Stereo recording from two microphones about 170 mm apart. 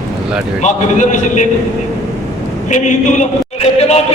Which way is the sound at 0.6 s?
45° left (ahead or behind).